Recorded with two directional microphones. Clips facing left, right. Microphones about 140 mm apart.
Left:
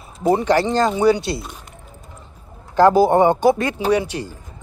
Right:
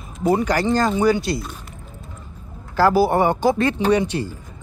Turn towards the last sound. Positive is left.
turn(degrees=10)  # may be behind; listen again after turning